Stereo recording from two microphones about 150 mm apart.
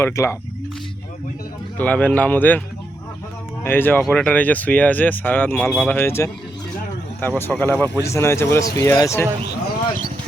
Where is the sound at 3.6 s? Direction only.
15° left (ahead or behind).